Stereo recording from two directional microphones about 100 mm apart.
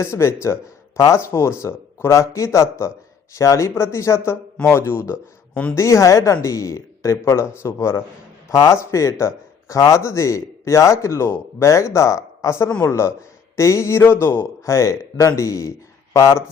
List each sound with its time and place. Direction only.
0.0 s a woman's voice: 25° left (ahead or behind)